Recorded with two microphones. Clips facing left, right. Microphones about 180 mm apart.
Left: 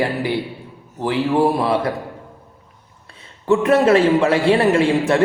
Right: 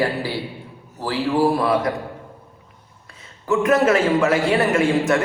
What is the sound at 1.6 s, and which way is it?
Speech, 25° left (ahead or behind).